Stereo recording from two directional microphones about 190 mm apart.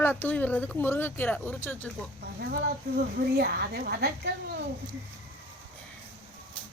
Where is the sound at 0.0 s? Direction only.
10° left (ahead or behind).